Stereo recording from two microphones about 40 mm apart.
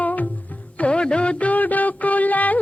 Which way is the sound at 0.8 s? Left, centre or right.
Left.